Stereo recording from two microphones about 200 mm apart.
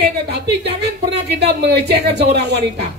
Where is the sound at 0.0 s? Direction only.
55° right (ahead or behind).